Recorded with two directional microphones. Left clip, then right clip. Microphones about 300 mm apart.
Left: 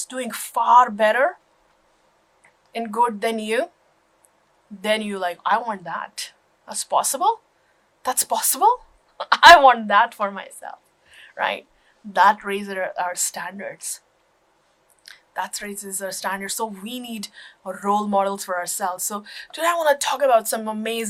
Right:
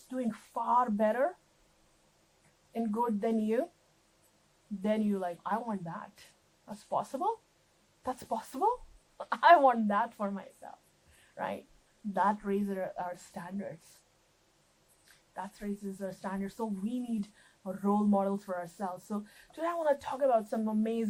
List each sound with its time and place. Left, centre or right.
0.1 s a woman's voice: centre
2.7 s a woman's voice: centre
4.8 s a woman's voice: centre
8.0 s a woman's voice: centre
15.3 s a woman's voice: centre
17.9 s speech: left
18.2 s a woman's voice: centre